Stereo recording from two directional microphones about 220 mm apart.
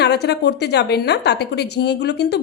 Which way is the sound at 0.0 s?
50° left (ahead or behind).